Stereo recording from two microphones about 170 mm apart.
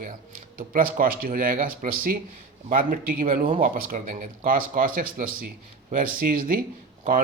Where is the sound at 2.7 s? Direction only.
55° right (ahead or behind).